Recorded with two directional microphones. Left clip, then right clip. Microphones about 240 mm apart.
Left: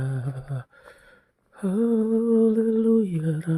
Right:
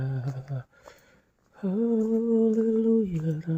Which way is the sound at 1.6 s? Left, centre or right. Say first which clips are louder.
Left 3 dB; left.